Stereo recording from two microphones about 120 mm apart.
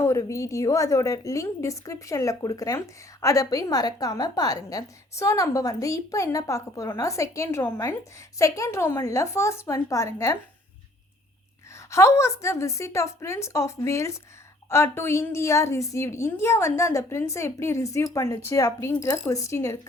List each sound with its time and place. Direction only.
0.0 s a woman's voice: 25° left (ahead or behind)
11.9 s a woman's voice: 25° left (ahead or behind)